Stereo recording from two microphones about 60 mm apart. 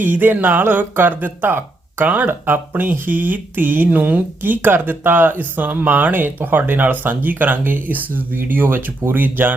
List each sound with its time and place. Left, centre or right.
0.0 s speech: right